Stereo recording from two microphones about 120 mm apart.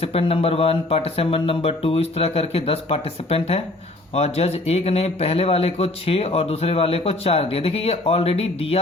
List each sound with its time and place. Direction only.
0.0 s speech: 55° left (ahead or behind)